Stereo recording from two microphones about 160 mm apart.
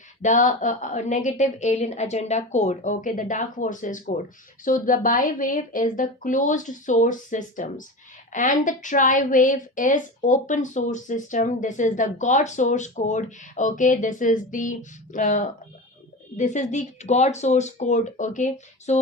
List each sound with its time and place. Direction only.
0.2 s a woman's voice: 50° left (ahead or behind)